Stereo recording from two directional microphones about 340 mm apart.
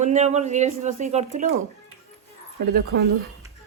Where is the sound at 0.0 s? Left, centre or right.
Centre.